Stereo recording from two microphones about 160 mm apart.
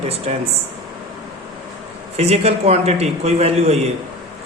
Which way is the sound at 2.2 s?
40° right (ahead or behind).